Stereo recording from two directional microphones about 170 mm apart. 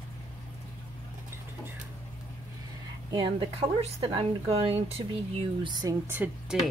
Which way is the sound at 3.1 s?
30° right (ahead or behind).